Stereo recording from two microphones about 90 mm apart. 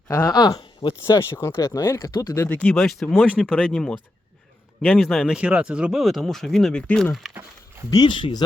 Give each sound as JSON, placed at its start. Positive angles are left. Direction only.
{"t": 0.1, "sound": "speech", "side_deg": 35}
{"t": 0.3, "sound": "speech", "side_deg": 50}
{"t": 1.0, "sound": "speech", "side_deg": 30}
{"t": 2.0, "sound": "speech", "side_deg": 40}
{"t": 2.5, "sound": "speech", "side_deg": 15}
{"t": 2.7, "sound": "speech", "side_deg": 0}
{"t": 5.0, "sound": "speech", "side_deg": -5}
{"t": 7.1, "sound": "speech", "side_deg": 0}
{"t": 7.9, "sound": "speech", "side_deg": 45}
{"t": 8.1, "sound": "speech", "side_deg": 55}